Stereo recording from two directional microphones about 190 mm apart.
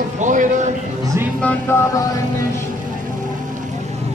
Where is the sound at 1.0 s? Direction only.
15° right (ahead or behind).